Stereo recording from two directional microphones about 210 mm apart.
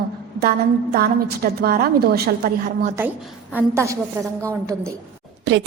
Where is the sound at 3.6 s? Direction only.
10° right (ahead or behind).